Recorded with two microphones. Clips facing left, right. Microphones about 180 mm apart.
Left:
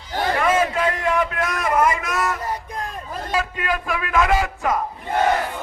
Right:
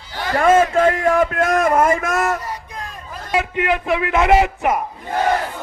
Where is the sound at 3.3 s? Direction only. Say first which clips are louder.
Right 5 dB; 20° right (ahead or behind).